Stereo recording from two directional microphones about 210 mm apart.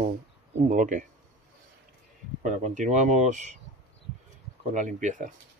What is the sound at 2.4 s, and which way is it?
Speech, 35° right (ahead or behind).